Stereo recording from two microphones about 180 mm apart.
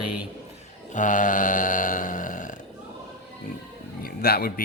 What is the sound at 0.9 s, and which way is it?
A man's voice, 45° left (ahead or behind).